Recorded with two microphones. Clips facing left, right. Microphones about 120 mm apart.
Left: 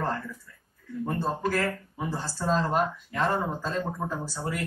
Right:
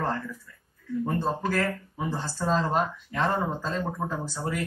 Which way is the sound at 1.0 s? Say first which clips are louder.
Even; 5° left (ahead or behind).